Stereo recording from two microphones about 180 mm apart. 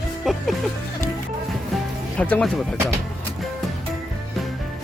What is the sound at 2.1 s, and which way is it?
Speech, 5° left (ahead or behind).